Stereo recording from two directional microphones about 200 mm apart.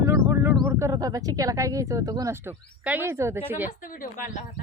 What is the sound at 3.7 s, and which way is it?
Speech, 40° left (ahead or behind).